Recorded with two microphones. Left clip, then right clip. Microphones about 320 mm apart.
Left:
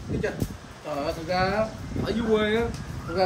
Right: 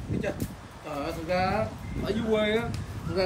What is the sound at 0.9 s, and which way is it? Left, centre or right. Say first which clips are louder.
A man's voice: left 2 dB; centre.